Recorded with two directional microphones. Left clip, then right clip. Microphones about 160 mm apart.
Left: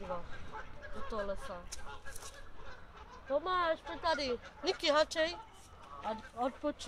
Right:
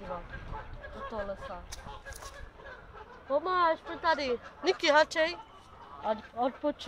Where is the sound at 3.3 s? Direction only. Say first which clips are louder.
Right 5 dB; centre (ahead or behind); by 5.4 s 15° right (ahead or behind).